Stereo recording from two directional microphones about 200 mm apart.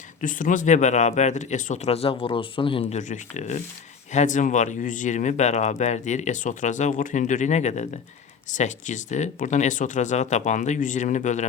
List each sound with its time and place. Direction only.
0.2 s speech: 40° left (ahead or behind)
2.9 s speech: 35° left (ahead or behind)